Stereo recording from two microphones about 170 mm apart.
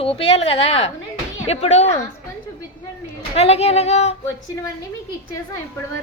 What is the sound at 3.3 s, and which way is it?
Speech, 35° left (ahead or behind).